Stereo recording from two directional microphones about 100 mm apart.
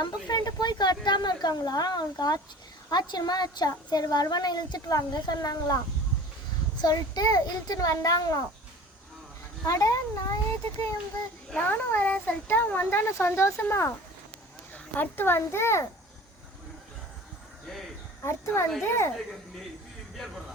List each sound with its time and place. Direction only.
0.0 s a woman's voice: 45° left (ahead or behind)
6.8 s a child's voice: 40° left (ahead or behind)
9.6 s a child's voice: 35° left (ahead or behind)
11.5 s a child's voice: 20° left (ahead or behind)
18.2 s a child's voice: 25° left (ahead or behind)
20.1 s speech: centre (ahead or behind)